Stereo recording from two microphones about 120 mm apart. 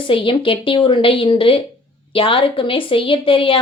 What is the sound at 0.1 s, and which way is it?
A woman's voice, 45° left (ahead or behind).